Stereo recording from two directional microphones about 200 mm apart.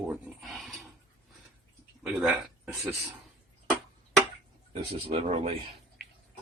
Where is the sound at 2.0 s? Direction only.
5° right (ahead or behind).